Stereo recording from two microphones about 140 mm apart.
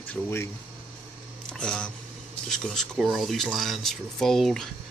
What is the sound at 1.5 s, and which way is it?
Speech, 5° left (ahead or behind).